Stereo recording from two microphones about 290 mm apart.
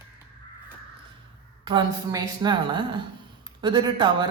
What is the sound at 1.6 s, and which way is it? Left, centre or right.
Speech, centre.